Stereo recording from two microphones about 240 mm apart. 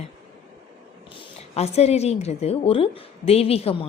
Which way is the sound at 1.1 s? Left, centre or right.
Left.